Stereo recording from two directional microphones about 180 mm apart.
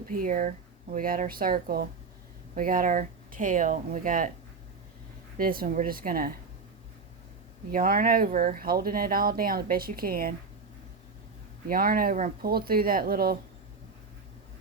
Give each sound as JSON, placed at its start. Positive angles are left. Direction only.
{"t": 0.1, "sound": "speech", "side_deg": -50}
{"t": 5.4, "sound": "speech", "side_deg": -55}
{"t": 7.7, "sound": "speech", "side_deg": -50}
{"t": 11.7, "sound": "speech", "side_deg": -55}